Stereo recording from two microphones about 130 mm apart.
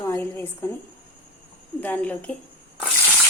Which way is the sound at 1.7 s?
10° left (ahead or behind).